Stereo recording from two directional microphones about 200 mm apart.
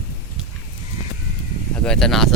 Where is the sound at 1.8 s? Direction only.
5° left (ahead or behind).